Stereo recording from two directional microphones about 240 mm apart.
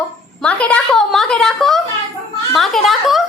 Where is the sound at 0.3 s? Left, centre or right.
Centre.